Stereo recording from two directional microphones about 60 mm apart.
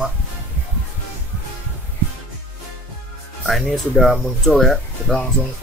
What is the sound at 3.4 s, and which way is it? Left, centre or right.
Speech, centre.